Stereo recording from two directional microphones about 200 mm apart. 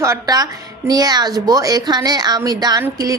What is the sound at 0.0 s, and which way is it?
Speech, 15° right (ahead or behind).